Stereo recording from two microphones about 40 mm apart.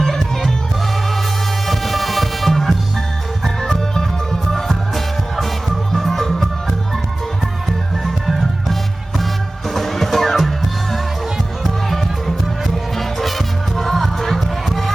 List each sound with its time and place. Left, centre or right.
0.0 s music: centre
1.6 s music: centre
3.9 s music: centre
4.7 s music: centre
8.0 s music: centre
12.6 s music: centre